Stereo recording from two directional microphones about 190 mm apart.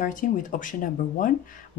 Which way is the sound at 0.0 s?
45° left (ahead or behind).